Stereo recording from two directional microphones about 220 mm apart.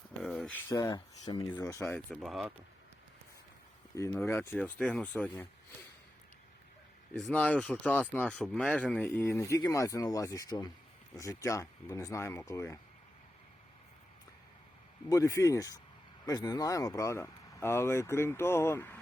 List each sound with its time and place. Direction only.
0.2 s a sound: centre (ahead or behind)
0.7 s speech: 15° left (ahead or behind)
2.2 s speech: centre (ahead or behind)
3.9 s speech: 15° left (ahead or behind)
7.1 s speech: 5° left (ahead or behind)
15.1 s speech: 15° left (ahead or behind)